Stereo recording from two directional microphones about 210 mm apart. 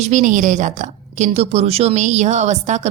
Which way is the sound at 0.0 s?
35° right (ahead or behind).